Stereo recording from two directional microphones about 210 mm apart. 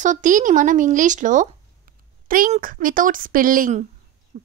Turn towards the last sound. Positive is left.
turn(degrees=-40)  # may be behind; listen again after turning